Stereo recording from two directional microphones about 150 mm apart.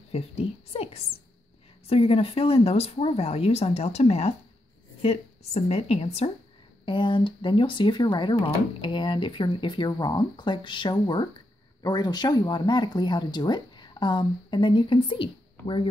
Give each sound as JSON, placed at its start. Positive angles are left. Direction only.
{"t": 0.1, "sound": "speech", "side_deg": 45}